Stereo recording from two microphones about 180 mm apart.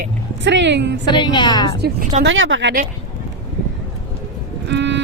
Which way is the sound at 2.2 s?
90° right.